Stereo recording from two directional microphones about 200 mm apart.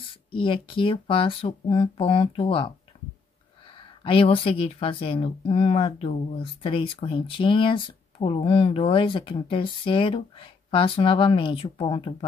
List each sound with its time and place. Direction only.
0.3 s speech: 25° left (ahead or behind)
4.0 s speech: 25° left (ahead or behind)